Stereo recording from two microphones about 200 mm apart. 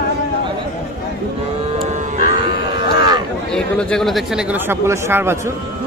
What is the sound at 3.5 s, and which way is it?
Speech, 5° left (ahead or behind).